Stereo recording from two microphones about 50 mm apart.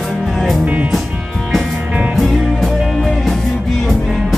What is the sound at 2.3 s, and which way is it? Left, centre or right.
Music, centre.